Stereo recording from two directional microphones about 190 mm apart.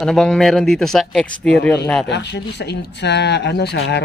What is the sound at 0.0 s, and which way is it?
Speech, centre (ahead or behind).